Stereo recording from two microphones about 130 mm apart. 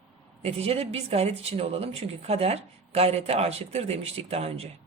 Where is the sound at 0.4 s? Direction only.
50° right (ahead or behind).